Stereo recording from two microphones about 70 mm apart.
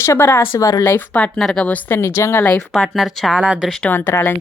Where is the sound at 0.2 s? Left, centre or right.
Left.